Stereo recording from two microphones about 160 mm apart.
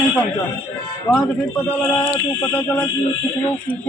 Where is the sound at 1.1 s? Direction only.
5° left (ahead or behind).